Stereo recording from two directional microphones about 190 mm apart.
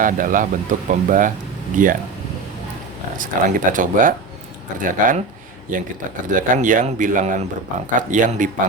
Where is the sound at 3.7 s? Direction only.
45° right (ahead or behind).